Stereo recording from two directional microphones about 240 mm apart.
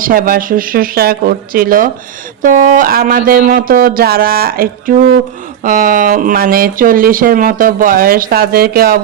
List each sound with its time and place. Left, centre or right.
0.0 s speech: right